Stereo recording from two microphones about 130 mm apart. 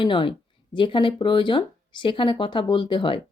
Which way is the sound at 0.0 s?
40° left (ahead or behind).